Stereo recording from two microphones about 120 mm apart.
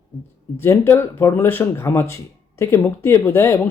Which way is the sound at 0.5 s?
20° left (ahead or behind).